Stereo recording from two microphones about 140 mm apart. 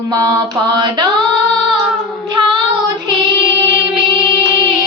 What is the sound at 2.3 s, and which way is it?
Child singing, 35° right (ahead or behind).